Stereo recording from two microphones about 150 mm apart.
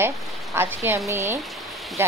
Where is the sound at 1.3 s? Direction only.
Centre (ahead or behind).